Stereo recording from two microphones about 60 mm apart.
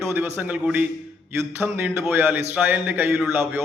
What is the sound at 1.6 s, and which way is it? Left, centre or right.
A man's voice, right.